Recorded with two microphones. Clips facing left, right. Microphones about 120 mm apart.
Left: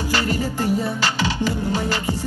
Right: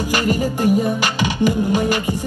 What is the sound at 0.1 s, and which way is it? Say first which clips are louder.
Music: right 3 dB; 15° right (ahead or behind).